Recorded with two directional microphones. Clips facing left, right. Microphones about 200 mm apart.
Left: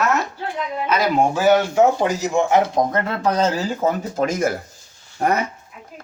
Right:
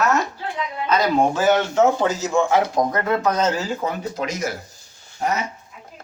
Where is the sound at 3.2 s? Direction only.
30° left (ahead or behind); by 5.4 s 55° left (ahead or behind).